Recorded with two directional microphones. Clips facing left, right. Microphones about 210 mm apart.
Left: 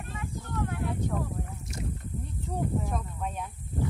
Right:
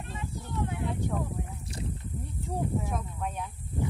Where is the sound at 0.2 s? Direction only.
20° right (ahead or behind).